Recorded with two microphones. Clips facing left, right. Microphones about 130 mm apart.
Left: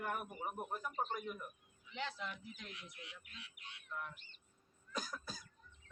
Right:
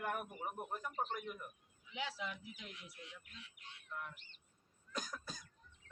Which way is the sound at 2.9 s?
70° left (ahead or behind).